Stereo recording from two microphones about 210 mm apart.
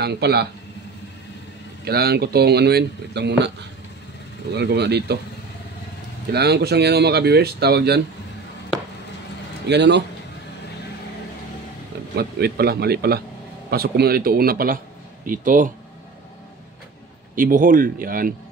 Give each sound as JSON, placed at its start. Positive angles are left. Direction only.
{"t": 0.0, "sound": "speech", "side_deg": -50}
{"t": 1.9, "sound": "speech", "side_deg": -50}
{"t": 6.3, "sound": "speech", "side_deg": -50}
{"t": 9.7, "sound": "a man's voice", "side_deg": -55}
{"t": 12.2, "sound": "speech", "side_deg": -50}
{"t": 17.4, "sound": "speech", "side_deg": -40}